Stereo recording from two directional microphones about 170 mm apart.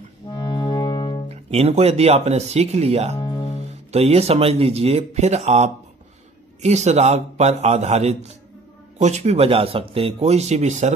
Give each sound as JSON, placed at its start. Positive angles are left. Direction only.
{"t": 0.3, "sound": "music", "side_deg": 25}
{"t": 1.3, "sound": "speech", "side_deg": -40}
{"t": 3.2, "sound": "music", "side_deg": 25}
{"t": 3.9, "sound": "speech", "side_deg": -35}